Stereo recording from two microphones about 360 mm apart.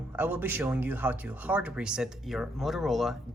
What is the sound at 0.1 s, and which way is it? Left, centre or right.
Speech, centre.